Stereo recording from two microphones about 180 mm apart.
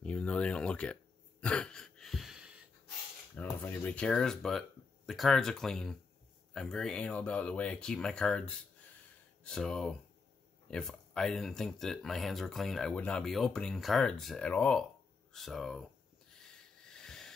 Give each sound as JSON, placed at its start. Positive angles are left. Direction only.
{"t": 0.0, "sound": "speech", "side_deg": 5}
{"t": 1.4, "sound": "throat clearing", "side_deg": 5}
{"t": 3.3, "sound": "speech", "side_deg": 10}
{"t": 16.3, "sound": "a sound", "side_deg": 5}